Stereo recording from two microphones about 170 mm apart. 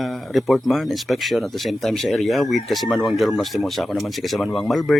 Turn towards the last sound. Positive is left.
turn(degrees=0)  # may be behind; listen again after turning